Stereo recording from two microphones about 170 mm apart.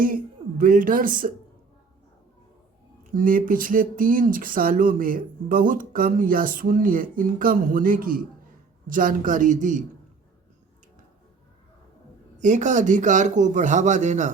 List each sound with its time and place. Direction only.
0.6 s a man's voice: 55° right (ahead or behind)
3.0 s a man's voice: 55° right (ahead or behind)
12.4 s a man's voice: 45° right (ahead or behind)